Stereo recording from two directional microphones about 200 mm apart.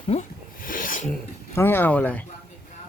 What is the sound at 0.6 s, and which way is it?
Filing, 45° left (ahead or behind).